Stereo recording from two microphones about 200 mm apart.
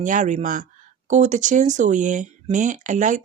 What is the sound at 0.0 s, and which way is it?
Speech, 40° right (ahead or behind).